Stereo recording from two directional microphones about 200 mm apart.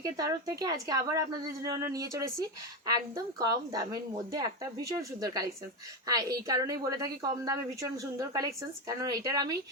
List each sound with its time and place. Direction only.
0.0 s a woman's voice: 20° right (ahead or behind)